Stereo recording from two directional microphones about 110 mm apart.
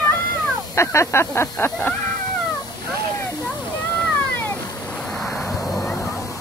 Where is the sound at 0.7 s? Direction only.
25° left (ahead or behind).